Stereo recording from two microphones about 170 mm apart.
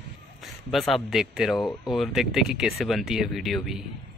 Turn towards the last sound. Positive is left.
turn(degrees=0)  # may be behind; listen again after turning